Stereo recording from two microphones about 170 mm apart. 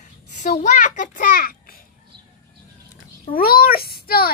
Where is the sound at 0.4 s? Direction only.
45° left (ahead or behind).